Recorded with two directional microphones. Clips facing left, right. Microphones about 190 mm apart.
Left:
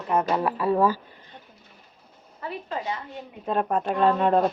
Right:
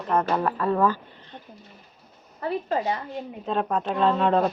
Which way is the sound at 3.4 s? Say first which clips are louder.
Left 2 dB; 10° left (ahead or behind).